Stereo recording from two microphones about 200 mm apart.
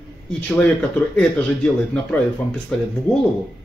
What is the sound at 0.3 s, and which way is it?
Speech, 5° left (ahead or behind).